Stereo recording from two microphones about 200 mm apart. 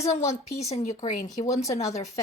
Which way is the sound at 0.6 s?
35° left (ahead or behind).